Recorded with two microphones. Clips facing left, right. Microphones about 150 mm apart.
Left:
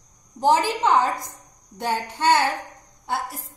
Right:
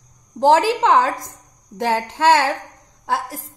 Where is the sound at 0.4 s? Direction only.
90° right.